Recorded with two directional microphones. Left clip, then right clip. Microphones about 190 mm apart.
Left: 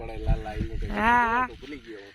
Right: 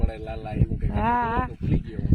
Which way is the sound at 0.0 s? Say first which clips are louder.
Right 1 dB; 5° right (ahead or behind).